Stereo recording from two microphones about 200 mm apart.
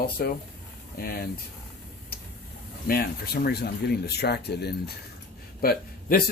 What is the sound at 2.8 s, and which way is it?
Speech, 50° left (ahead or behind).